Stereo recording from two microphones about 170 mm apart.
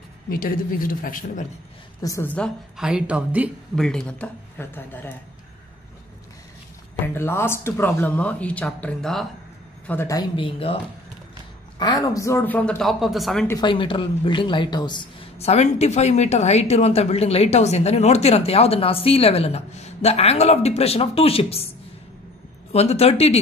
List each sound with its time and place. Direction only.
0.3 s a woman's voice: 55° left (ahead or behind)
2.0 s a woman's voice: 20° left (ahead or behind)
2.3 s speech: centre (ahead or behind)
3.7 s speech: 5° left (ahead or behind)
7.2 s speech: 15° left (ahead or behind)
9.8 s speech: 15° left (ahead or behind)
10.3 s a woman's voice: 30° left (ahead or behind)
11.8 s speech: 20° left (ahead or behind); by 13.5 s centre (ahead or behind)
13.5 s a woman's voice: 25° left (ahead or behind)
22.7 s a woman's voice: 35° left (ahead or behind)